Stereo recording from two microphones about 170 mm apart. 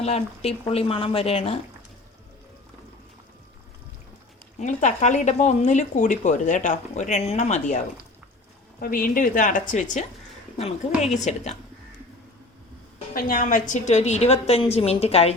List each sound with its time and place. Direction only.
0.0 s a woman's voice: 40° left (ahead or behind)
4.6 s speech: 45° left (ahead or behind)
8.8 s a woman's voice: 55° left (ahead or behind); by 11.5 s 40° left (ahead or behind)
13.1 s a woman's voice: 55° left (ahead or behind); by 15.4 s 35° left (ahead or behind)